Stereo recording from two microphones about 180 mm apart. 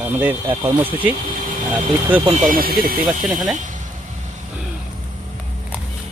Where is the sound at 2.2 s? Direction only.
35° right (ahead or behind).